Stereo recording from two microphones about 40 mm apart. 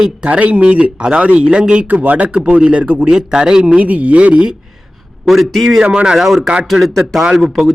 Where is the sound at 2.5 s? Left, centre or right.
Right.